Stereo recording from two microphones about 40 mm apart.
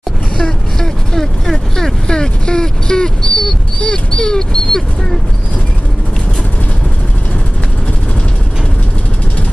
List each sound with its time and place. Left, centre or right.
0.4 s speech: centre
2.0 s speech: centre